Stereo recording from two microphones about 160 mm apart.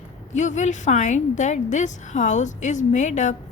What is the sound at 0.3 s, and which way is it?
A woman's voice, 50° left (ahead or behind).